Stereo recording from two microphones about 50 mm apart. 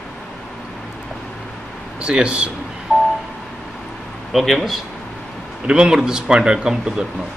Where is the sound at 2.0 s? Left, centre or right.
Centre.